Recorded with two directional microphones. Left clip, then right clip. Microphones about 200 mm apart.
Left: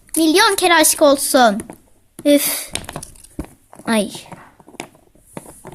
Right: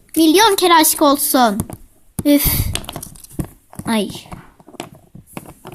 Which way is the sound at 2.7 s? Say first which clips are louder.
Right 2 dB; 10° right (ahead or behind).